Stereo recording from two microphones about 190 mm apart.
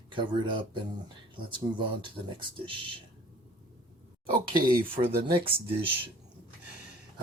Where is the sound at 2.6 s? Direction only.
25° right (ahead or behind).